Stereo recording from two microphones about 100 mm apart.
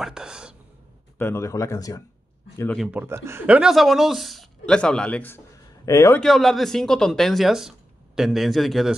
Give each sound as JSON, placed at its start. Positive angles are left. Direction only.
{"t": 0.0, "sound": "whispering", "side_deg": -5}
{"t": 1.1, "sound": "speech", "side_deg": 25}
{"t": 2.9, "sound": "a man's voice", "side_deg": -15}
{"t": 5.9, "sound": "a man's voice", "side_deg": 30}
{"t": 6.2, "sound": "speech", "side_deg": 0}